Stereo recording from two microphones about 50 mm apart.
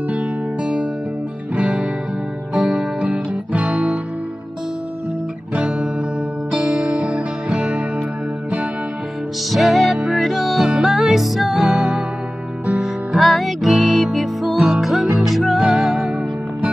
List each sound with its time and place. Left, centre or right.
1.5 s music: right
2.5 s music: centre
3.1 s music: right
5.5 s music: right
6.5 s music: centre
9.5 s music: centre